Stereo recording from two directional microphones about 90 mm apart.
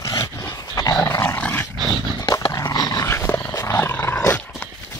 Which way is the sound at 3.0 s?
30° left (ahead or behind).